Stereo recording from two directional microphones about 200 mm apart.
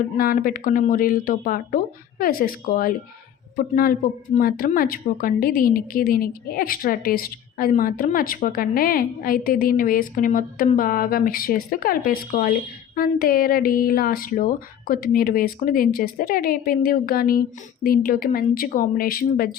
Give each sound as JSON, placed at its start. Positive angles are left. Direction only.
{"t": 0.2, "sound": "a woman's voice", "side_deg": 45}